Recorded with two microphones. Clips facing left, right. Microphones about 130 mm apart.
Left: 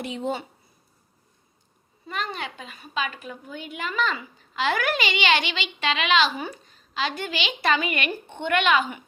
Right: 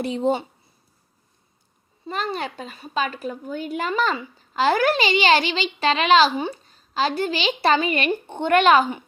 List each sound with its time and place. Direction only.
0.0 s a woman's voice: 35° right (ahead or behind)
2.0 s a woman's voice: 35° right (ahead or behind)